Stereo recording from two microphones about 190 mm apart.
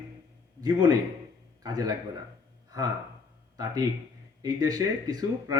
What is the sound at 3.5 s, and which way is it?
Speech, 20° right (ahead or behind).